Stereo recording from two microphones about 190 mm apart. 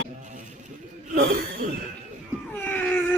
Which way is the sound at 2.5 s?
10° left (ahead or behind).